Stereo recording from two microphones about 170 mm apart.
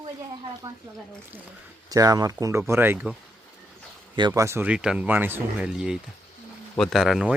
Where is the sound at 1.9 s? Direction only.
20° right (ahead or behind).